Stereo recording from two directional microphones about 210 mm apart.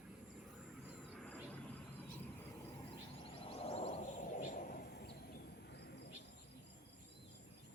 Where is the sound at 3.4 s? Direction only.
25° left (ahead or behind); by 6.1 s 50° left (ahead or behind).